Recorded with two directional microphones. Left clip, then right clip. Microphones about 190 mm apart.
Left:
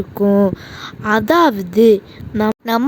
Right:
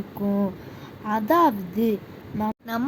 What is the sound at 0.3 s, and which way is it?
A woman's voice, 50° left (ahead or behind).